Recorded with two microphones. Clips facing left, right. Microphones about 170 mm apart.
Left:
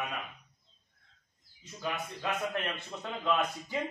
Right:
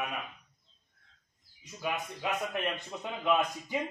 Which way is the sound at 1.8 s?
15° right (ahead or behind).